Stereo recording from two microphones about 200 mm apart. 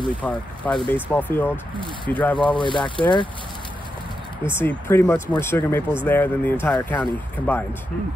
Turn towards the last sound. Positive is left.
turn(degrees=10)  # may be behind; listen again after turning